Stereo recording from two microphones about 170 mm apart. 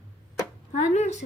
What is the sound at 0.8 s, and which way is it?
Speech, 45° left (ahead or behind).